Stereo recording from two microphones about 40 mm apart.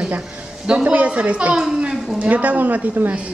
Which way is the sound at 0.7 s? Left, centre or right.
Right.